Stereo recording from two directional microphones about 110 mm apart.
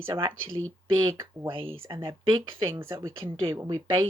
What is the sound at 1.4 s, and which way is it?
Speech, 55° right (ahead or behind).